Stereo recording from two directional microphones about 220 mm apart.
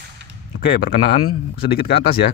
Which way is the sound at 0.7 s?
45° left (ahead or behind).